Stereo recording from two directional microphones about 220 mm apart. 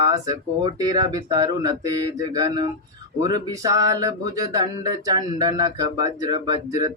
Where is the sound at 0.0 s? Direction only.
15° right (ahead or behind).